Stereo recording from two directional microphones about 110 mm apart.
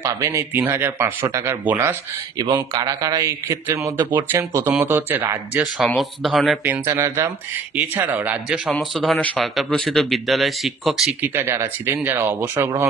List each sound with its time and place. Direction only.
0.0 s speech: 25° right (ahead or behind)
2.3 s a man's voice: 35° right (ahead or behind); by 5.6 s 15° right (ahead or behind)
5.9 s speech: centre (ahead or behind)
6.9 s speech: 25° right (ahead or behind)
8.6 s speech: 5° left (ahead or behind)
11.2 s speech: 20° right (ahead or behind)